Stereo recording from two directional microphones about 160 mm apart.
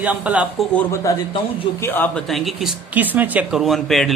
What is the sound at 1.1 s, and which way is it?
A man's voice, 20° left (ahead or behind).